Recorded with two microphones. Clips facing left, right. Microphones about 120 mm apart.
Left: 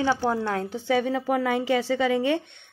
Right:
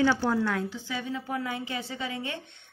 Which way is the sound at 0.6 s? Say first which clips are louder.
Left 10 dB; 60° left (ahead or behind).